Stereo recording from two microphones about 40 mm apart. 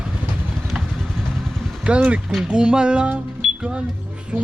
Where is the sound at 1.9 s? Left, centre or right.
Right.